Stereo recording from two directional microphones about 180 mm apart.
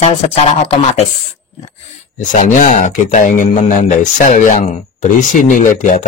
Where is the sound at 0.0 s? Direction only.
35° left (ahead or behind).